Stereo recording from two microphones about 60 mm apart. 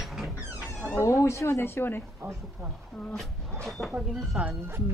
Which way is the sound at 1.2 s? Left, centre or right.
Left.